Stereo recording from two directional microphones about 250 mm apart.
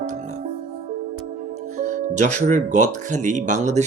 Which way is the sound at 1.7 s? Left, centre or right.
Right.